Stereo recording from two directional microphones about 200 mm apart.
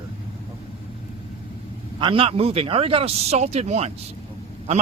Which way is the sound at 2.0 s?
25° right (ahead or behind).